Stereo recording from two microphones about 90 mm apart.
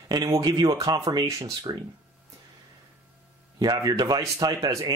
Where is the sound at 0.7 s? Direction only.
40° right (ahead or behind).